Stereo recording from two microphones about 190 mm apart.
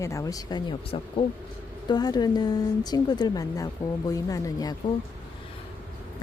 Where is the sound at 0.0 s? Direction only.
15° left (ahead or behind).